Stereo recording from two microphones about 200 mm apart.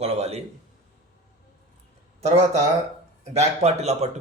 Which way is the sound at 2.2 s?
35° right (ahead or behind).